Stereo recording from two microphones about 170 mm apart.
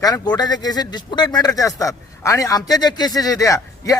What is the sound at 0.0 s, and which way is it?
Speech, 20° left (ahead or behind).